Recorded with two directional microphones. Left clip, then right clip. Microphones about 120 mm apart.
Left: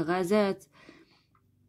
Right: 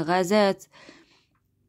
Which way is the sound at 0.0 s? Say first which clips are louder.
Right 5 dB; 35° right (ahead or behind).